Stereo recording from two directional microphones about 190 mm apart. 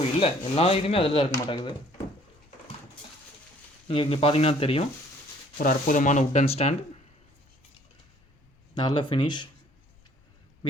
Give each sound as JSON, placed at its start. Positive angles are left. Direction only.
{"t": 0.2, "sound": "speech", "side_deg": 30}
{"t": 3.8, "sound": "speech", "side_deg": 30}
{"t": 5.5, "sound": "speech", "side_deg": 45}
{"t": 8.7, "sound": "speech", "side_deg": 25}